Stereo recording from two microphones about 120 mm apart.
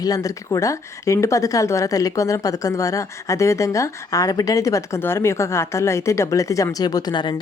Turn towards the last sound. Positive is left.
turn(degrees=35)  # may be behind; listen again after turning